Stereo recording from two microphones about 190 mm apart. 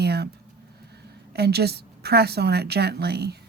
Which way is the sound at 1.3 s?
60° right (ahead or behind).